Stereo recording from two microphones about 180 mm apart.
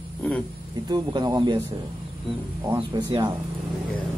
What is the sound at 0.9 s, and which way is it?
Speech, 20° right (ahead or behind).